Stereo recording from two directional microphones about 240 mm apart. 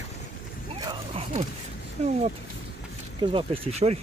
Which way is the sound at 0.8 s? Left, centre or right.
Right.